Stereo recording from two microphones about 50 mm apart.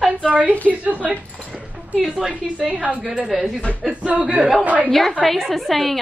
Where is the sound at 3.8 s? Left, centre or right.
Right.